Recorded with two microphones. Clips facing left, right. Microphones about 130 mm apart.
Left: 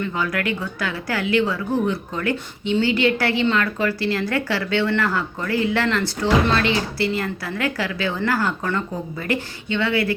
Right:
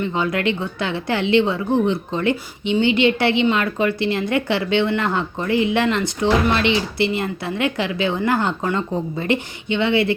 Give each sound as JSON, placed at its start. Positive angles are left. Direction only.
{"t": 0.0, "sound": "a woman's voice", "side_deg": -25}